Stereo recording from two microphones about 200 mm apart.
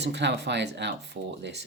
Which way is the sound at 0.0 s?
60° right (ahead or behind).